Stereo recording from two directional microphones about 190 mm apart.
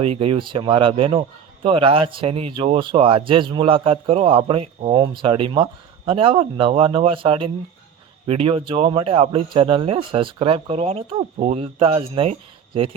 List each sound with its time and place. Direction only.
0.0 s speech: 30° right (ahead or behind)